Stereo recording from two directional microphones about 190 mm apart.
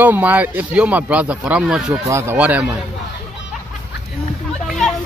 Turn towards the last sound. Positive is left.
turn(degrees=0)  # may be behind; listen again after turning